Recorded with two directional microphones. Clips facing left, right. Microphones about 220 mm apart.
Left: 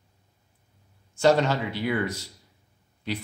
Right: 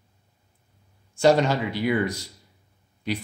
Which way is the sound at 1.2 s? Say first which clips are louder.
Right 2 dB; 15° right (ahead or behind).